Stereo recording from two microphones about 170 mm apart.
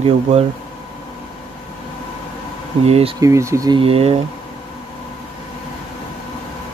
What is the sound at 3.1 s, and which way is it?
Speech, 20° right (ahead or behind).